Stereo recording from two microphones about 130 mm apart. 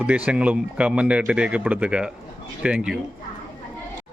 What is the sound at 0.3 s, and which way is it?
Speech, 10° right (ahead or behind).